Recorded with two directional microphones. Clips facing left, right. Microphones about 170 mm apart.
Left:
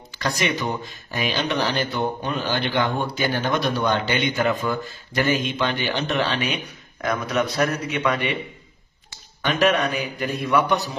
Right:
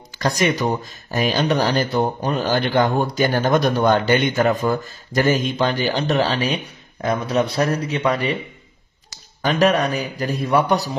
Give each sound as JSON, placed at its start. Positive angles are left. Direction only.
{"t": 0.2, "sound": "speech", "side_deg": -45}
{"t": 9.4, "sound": "speech", "side_deg": -35}